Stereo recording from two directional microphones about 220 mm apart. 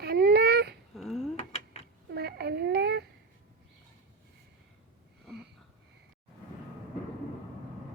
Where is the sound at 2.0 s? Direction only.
45° right (ahead or behind).